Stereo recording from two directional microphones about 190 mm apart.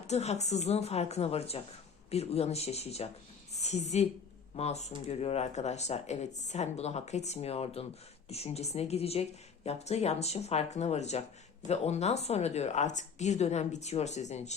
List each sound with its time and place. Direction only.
0.1 s a woman's voice: 35° left (ahead or behind)